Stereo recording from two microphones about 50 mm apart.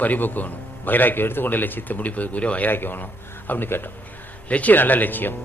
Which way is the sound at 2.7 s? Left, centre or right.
Left.